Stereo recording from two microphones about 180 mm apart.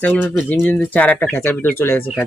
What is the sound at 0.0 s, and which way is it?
Speech, 10° left (ahead or behind).